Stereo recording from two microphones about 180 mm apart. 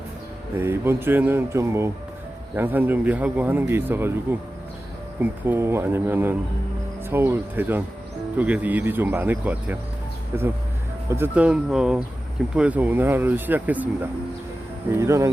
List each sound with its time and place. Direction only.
0.6 s speech: 15° right (ahead or behind)